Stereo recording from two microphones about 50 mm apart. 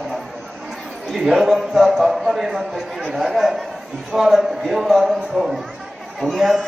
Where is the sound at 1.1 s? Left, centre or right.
Centre.